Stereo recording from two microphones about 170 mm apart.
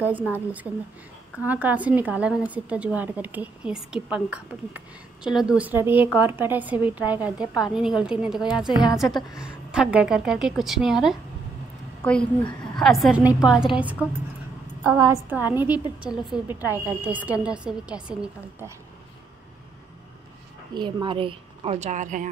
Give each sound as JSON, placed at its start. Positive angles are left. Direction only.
{"t": 0.3, "sound": "a woman's voice", "side_deg": -10}
{"t": 20.7, "sound": "a woman's voice", "side_deg": -30}